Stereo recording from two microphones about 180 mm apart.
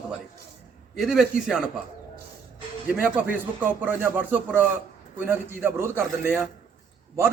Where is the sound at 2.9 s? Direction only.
10° right (ahead or behind).